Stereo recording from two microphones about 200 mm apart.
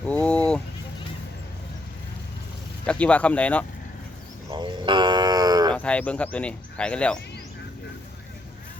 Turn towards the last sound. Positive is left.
turn(degrees=5)  # may be behind; listen again after turning